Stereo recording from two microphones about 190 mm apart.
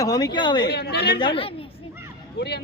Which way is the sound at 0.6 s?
55° left (ahead or behind).